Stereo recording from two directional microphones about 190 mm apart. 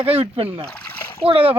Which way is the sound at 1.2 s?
30° right (ahead or behind).